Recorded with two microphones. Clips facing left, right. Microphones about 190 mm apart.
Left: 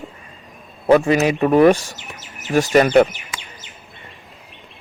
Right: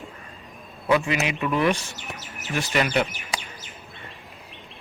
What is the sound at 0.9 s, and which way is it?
Speech, 40° left (ahead or behind).